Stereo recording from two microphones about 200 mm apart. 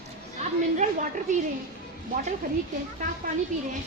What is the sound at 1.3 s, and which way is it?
Speech, 35° right (ahead or behind).